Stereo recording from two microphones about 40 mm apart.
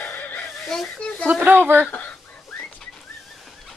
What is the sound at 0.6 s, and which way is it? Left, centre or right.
Speech, centre.